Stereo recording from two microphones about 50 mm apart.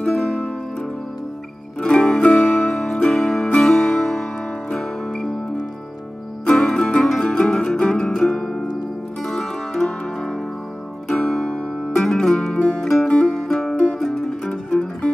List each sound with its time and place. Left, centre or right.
0.0 s music: centre
9.2 s zither: centre
11.1 s music: centre
11.6 s music: left
12.0 s music: centre
12.5 s music: left
12.8 s music: centre
13.1 s music: centre
13.4 s music: centre
13.7 s music: left
14.0 s music: centre
14.4 s music: centre